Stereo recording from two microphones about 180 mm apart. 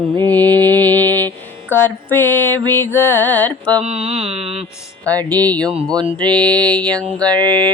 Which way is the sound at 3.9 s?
35° right (ahead or behind).